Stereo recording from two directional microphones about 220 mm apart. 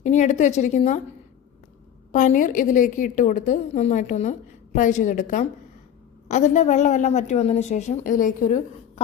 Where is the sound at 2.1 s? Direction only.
35° left (ahead or behind).